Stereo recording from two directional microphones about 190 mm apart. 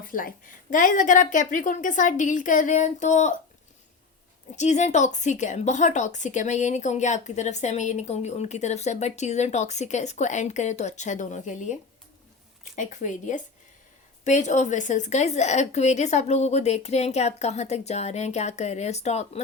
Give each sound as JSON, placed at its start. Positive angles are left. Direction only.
{"t": 0.1, "sound": "a woman's voice", "side_deg": 45}
{"t": 4.5, "sound": "speech", "side_deg": 40}